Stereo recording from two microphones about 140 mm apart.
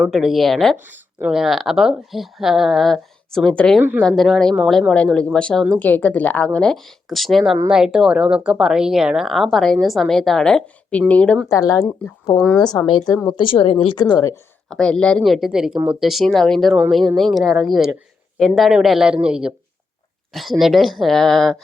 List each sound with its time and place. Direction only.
0.0 s speech: centre (ahead or behind)
3.8 s speech: 15° right (ahead or behind)
4.0 s speech: centre (ahead or behind)
11.4 s speech: 25° left (ahead or behind)
12.4 s speech: 5° left (ahead or behind)
12.9 s a woman's voice: 35° left (ahead or behind)
14.7 s speech: 5° left (ahead or behind)